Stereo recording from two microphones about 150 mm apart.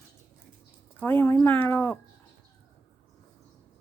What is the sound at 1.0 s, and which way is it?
Speech, 10° left (ahead or behind).